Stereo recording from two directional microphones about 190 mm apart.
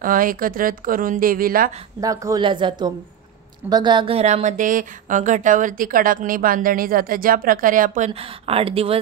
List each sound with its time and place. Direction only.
0.0 s speech: 45° right (ahead or behind)
2.0 s a woman's voice: 20° right (ahead or behind); by 8.1 s 45° right (ahead or behind)
8.1 s speech: 30° right (ahead or behind)